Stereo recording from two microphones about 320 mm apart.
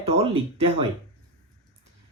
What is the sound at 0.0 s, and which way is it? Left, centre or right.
Speech, centre.